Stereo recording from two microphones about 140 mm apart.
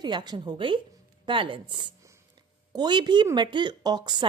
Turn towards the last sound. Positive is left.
turn(degrees=-30)  # may be behind; listen again after turning